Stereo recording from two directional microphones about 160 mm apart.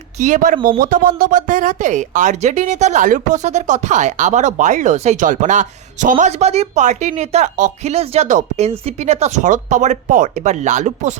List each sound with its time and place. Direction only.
0.2 s speech: 55° right (ahead or behind)